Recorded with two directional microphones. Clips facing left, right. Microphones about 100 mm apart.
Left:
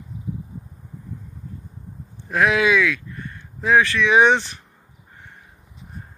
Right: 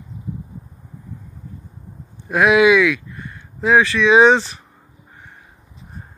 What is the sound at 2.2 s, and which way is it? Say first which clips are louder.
Speech: right 5 dB; 15° right (ahead or behind).